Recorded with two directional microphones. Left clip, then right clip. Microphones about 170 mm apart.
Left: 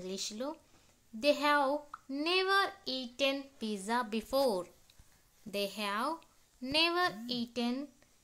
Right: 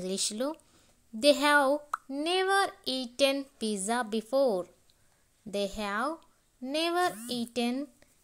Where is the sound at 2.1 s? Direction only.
15° right (ahead or behind).